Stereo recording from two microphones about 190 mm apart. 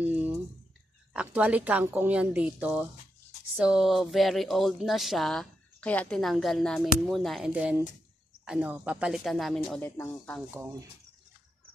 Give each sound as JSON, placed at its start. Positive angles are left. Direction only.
{"t": 0.0, "sound": "a sound", "side_deg": -10}
{"t": 1.1, "sound": "a woman's voice", "side_deg": -5}
{"t": 10.5, "sound": "a woman's voice", "side_deg": -15}